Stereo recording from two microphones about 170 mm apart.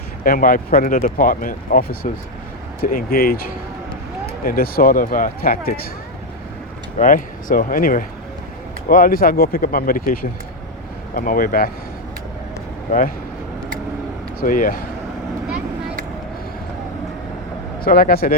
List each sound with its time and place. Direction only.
0.3 s speech: 55° left (ahead or behind)
7.0 s speech: 50° left (ahead or behind)
12.9 s speech: 50° left (ahead or behind)
14.4 s speech: 55° left (ahead or behind)
17.8 s speech: 60° left (ahead or behind)